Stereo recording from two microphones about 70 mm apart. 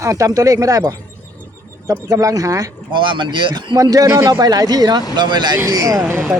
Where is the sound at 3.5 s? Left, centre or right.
Right.